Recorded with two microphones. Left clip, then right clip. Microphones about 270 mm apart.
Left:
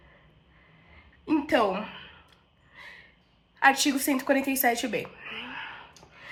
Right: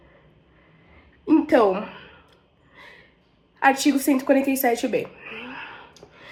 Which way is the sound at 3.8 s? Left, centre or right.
Centre.